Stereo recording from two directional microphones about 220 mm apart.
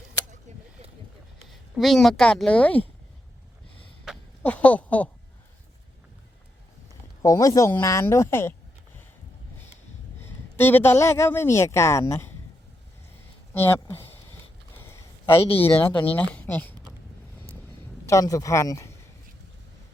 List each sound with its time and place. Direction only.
0.5 s a sound: 35° right (ahead or behind)
1.7 s speech: centre (ahead or behind)
4.0 s a sound: 5° left (ahead or behind)
7.2 s speech: 15° left (ahead or behind)
10.6 s speech: 10° left (ahead or behind)
13.5 s speech: 10° left (ahead or behind)
14.8 s a sound: 10° left (ahead or behind)
15.5 s speech: 10° left (ahead or behind)
18.0 s speech: 15° left (ahead or behind)